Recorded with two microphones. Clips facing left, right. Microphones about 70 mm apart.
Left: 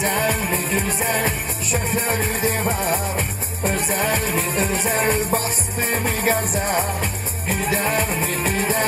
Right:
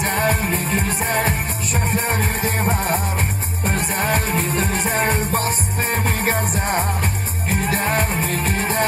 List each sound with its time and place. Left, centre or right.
0.0 s music: right